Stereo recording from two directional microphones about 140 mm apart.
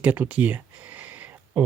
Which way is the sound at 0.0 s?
10° right (ahead or behind).